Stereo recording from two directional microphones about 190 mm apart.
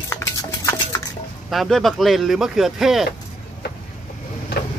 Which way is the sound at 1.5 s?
Centre (ahead or behind).